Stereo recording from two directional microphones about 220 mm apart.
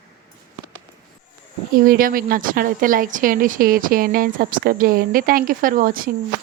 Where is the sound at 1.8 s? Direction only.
40° right (ahead or behind).